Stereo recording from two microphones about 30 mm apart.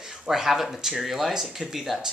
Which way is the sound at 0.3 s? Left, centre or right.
Centre.